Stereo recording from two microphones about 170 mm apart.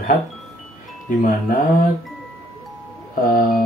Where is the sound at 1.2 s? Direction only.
50° left (ahead or behind).